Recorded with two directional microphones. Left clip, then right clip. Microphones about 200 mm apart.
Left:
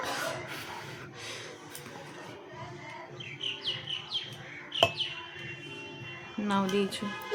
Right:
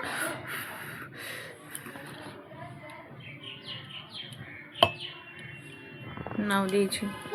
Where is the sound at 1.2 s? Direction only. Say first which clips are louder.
Right 1 dB; 5° right (ahead or behind).